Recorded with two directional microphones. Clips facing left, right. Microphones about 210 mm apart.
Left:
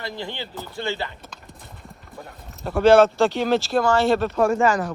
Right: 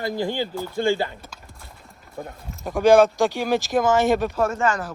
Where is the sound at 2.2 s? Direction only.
45° right (ahead or behind).